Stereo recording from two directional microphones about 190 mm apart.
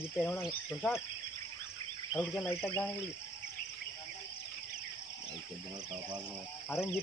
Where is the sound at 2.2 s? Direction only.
15° left (ahead or behind).